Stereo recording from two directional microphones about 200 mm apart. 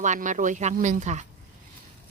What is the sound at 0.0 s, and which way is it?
Speech, 40° right (ahead or behind).